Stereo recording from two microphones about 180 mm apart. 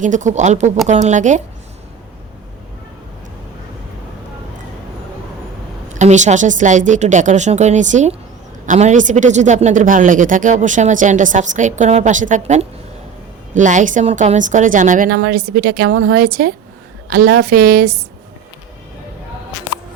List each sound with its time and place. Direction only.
0.0 s a woman's voice: 45° right (ahead or behind)
5.9 s a woman's voice: 40° right (ahead or behind)